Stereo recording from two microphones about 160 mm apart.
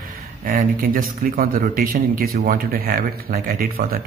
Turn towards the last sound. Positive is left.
turn(degrees=-65)  # may be behind; listen again after turning